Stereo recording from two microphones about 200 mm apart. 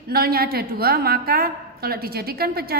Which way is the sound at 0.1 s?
50° right (ahead or behind).